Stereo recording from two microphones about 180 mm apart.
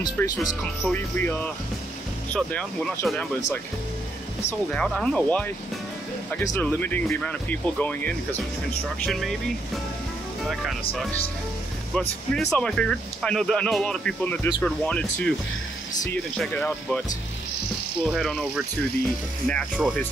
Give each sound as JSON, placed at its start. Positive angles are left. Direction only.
{"t": 0.0, "sound": "speech", "side_deg": 20}
{"t": 0.9, "sound": "speech", "side_deg": 10}
{"t": 10.4, "sound": "speech", "side_deg": 0}
{"t": 11.9, "sound": "speech", "side_deg": 5}
{"t": 18.0, "sound": "speech", "side_deg": 0}